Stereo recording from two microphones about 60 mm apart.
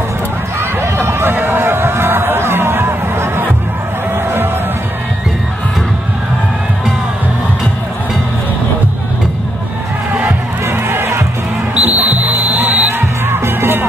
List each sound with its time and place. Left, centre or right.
0.6 s run: right
10.2 s crowd: right
11.7 s music: right
13.3 s music: right